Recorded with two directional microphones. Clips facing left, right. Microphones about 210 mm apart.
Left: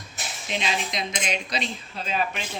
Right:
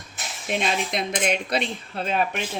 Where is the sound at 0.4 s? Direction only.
55° right (ahead or behind).